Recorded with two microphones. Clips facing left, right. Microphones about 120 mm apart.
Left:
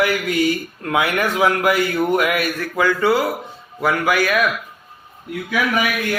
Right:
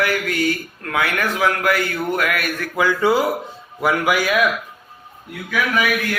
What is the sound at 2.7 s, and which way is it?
A man's voice, 10° right (ahead or behind).